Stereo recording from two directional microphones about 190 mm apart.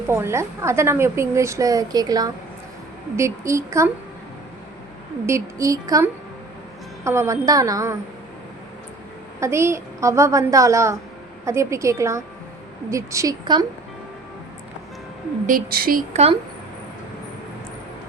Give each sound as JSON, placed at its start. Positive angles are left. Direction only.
{"t": 0.1, "sound": "a woman's voice", "side_deg": -15}
{"t": 5.2, "sound": "a woman's voice", "side_deg": -15}
{"t": 9.4, "sound": "a woman's voice", "side_deg": -15}
{"t": 15.4, "sound": "a woman's voice", "side_deg": -50}
{"t": 16.1, "sound": "speech", "side_deg": -30}